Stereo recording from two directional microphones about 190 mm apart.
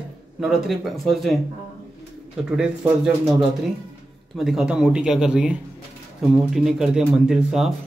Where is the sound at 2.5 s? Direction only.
5° right (ahead or behind).